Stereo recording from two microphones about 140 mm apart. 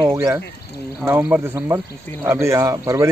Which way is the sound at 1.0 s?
15° right (ahead or behind).